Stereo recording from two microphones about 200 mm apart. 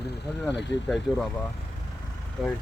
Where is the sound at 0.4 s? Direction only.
Centre (ahead or behind).